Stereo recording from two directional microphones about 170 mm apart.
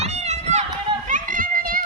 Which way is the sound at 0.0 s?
40° right (ahead or behind).